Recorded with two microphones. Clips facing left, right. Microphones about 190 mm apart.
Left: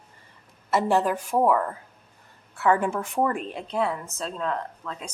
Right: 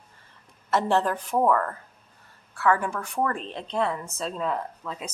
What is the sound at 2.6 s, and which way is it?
A woman's voice, 20° left (ahead or behind).